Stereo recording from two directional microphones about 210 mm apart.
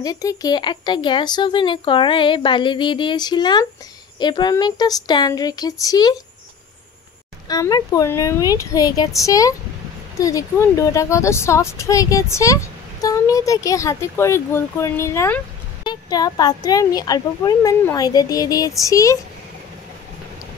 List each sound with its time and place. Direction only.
0.0 s speech: 15° left (ahead or behind)
7.4 s speech: 15° left (ahead or behind)